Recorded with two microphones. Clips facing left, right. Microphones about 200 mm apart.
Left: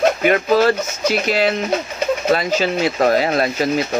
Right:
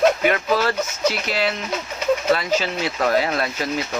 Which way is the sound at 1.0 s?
15° left (ahead or behind).